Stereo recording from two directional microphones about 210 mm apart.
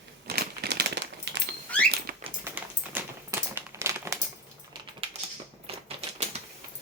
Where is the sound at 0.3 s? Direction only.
50° right (ahead or behind).